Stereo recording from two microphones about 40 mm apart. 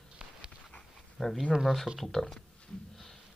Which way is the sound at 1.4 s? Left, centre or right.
Centre.